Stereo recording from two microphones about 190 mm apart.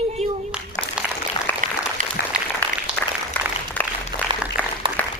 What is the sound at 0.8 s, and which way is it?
Applause, 25° left (ahead or behind).